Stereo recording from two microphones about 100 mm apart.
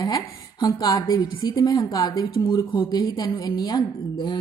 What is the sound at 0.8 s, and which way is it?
A woman's voice, 45° left (ahead or behind).